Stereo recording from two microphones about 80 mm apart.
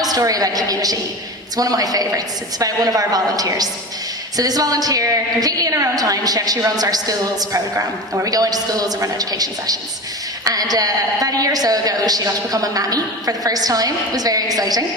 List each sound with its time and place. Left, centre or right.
0.0 s a woman's voice: right